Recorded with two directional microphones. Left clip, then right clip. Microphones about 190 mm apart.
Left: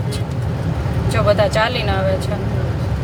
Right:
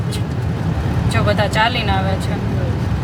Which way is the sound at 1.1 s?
Centre (ahead or behind).